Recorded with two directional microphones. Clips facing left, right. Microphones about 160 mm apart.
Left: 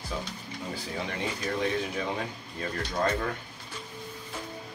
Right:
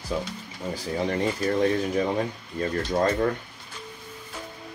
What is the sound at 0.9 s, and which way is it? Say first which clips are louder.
Speech: right 9 dB; 40° right (ahead or behind).